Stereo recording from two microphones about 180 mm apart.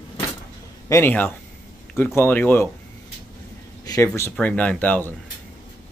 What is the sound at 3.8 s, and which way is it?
Speech, 15° left (ahead or behind).